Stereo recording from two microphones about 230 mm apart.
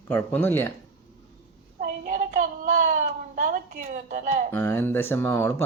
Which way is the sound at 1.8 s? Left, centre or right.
Right.